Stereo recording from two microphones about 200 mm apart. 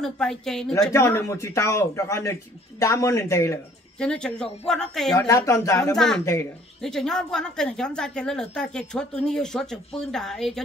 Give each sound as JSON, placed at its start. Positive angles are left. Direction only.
{"t": 0.0, "sound": "a woman's voice", "side_deg": 0}
{"t": 0.9, "sound": "speech", "side_deg": 15}
{"t": 4.0, "sound": "a woman's voice", "side_deg": 5}
{"t": 5.1, "sound": "speech", "side_deg": 15}
{"t": 5.9, "sound": "a woman's voice", "side_deg": 0}